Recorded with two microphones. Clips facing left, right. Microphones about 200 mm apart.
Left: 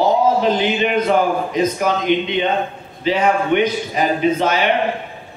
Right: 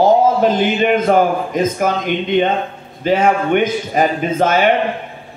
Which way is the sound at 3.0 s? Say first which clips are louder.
Right 2 dB; 50° right (ahead or behind).